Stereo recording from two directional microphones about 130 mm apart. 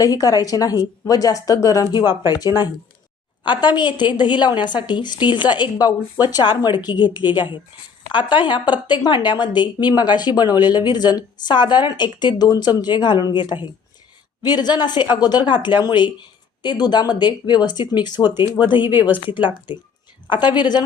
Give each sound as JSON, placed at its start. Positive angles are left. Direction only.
{"t": 0.0, "sound": "a woman's voice", "side_deg": 30}
{"t": 18.9, "sound": "speech", "side_deg": -15}
{"t": 19.3, "sound": "a woman's voice", "side_deg": 40}